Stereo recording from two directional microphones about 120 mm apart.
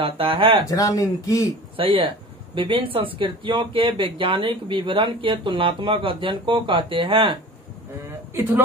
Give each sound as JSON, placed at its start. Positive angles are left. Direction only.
{"t": 0.0, "sound": "speech", "side_deg": -50}
{"t": 0.7, "sound": "speech", "side_deg": 30}
{"t": 1.8, "sound": "speech", "side_deg": -50}